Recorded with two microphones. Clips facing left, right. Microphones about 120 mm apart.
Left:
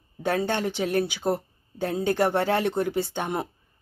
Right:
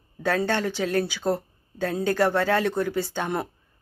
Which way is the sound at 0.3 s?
15° left (ahead or behind).